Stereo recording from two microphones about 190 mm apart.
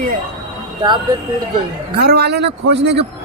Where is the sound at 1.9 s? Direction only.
55° right (ahead or behind).